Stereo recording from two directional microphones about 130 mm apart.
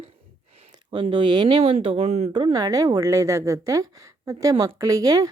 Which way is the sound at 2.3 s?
35° right (ahead or behind).